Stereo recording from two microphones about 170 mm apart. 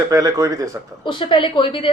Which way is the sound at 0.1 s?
20° right (ahead or behind).